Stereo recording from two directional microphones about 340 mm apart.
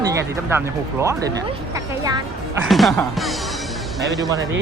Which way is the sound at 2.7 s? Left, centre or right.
Centre.